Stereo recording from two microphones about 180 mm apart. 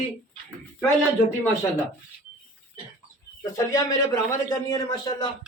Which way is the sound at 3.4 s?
15° left (ahead or behind).